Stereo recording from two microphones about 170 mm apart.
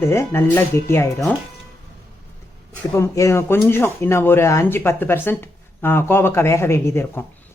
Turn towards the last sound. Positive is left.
turn(degrees=15)  # may be behind; listen again after turning